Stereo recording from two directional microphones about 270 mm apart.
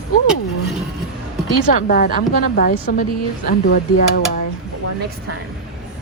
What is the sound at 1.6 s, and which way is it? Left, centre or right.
A woman's voice, left.